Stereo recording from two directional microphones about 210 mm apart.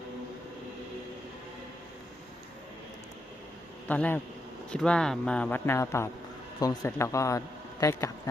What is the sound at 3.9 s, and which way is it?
A man's voice, 10° left (ahead or behind).